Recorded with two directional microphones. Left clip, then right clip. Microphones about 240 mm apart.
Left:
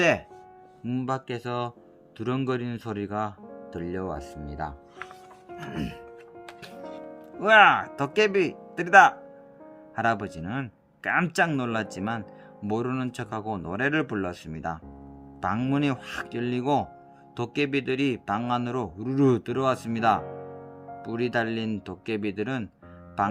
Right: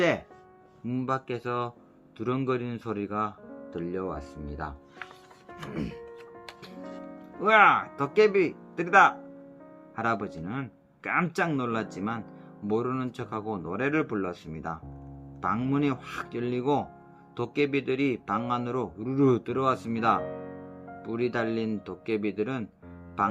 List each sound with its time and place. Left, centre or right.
0.9 s a man's voice: left
7.4 s a man's voice: left